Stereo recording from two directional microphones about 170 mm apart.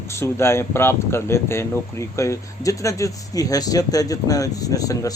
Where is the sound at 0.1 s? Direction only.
15° left (ahead or behind).